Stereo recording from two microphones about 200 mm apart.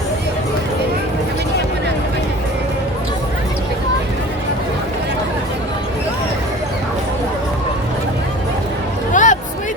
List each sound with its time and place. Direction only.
9.1 s hubbub: 40° left (ahead or behind)